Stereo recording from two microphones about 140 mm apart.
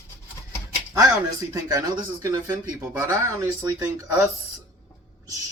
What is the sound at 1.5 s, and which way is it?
Speech, 25° right (ahead or behind).